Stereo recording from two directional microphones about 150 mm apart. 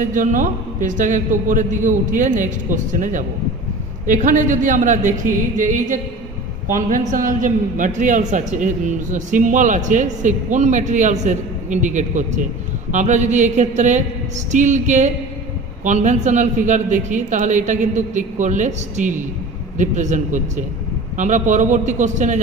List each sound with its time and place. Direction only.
0.0 s a man's voice: 60° right (ahead or behind)